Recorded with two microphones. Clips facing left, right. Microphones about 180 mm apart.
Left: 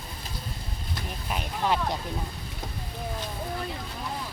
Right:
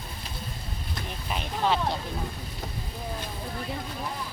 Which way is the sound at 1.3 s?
10° left (ahead or behind).